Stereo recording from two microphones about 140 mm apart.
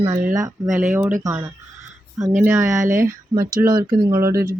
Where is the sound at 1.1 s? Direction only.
20° right (ahead or behind).